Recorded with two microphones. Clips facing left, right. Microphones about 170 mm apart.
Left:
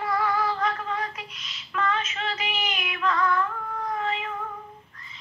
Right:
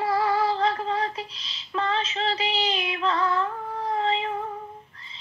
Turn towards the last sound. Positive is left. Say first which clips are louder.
# right 4 dB
turn(degrees=-30)  # may be behind; listen again after turning